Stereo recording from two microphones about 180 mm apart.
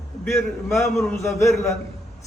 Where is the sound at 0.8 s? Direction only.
15° left (ahead or behind).